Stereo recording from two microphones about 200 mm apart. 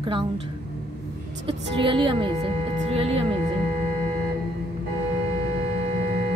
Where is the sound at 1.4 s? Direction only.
25° right (ahead or behind).